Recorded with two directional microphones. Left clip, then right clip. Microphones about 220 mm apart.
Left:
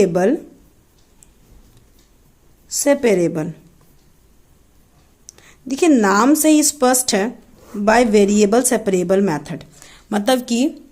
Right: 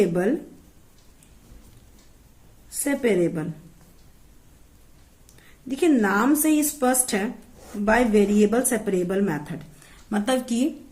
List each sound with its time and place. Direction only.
0.0 s a woman's voice: 45° left (ahead or behind)
2.8 s a woman's voice: 45° left (ahead or behind)
5.4 s a woman's voice: 45° left (ahead or behind)